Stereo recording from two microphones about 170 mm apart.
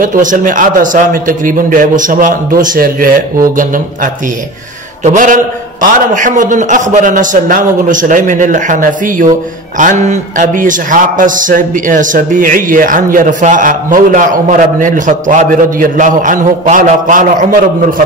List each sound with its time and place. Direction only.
0.0 s a man's voice: 50° right (ahead or behind)